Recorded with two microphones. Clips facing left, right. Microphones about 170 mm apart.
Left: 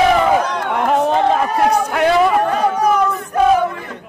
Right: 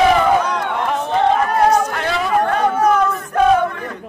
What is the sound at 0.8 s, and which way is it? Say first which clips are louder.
Chatter: left 6 dB; 60° left (ahead or behind).